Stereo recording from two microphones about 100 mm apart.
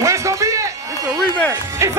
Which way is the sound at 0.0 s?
30° right (ahead or behind).